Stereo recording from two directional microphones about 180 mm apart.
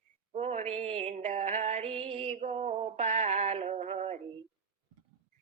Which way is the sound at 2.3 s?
40° right (ahead or behind).